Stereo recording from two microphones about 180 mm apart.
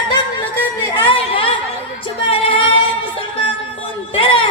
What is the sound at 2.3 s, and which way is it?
Female singing, 30° left (ahead or behind).